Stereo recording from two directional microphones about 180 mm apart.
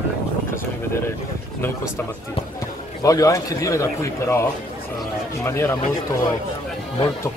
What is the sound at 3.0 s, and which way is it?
Speech, 20° left (ahead or behind).